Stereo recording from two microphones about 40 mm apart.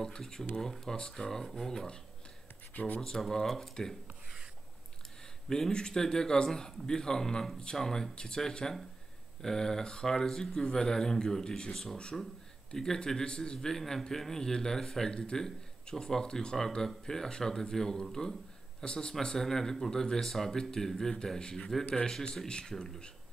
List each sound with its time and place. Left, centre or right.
0.0 s a man's voice: centre
2.7 s speech: left
3.0 s a man's voice: centre
5.5 s a man's voice: centre
7.8 s a man's voice: centre
11.7 s a man's voice: centre
12.0 s a man's voice: left